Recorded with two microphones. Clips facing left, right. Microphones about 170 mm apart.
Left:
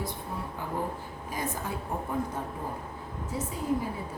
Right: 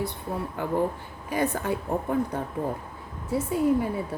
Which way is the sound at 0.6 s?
70° right (ahead or behind).